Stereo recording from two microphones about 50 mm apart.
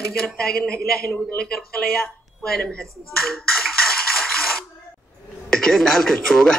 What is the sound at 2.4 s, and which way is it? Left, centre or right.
Speech, centre.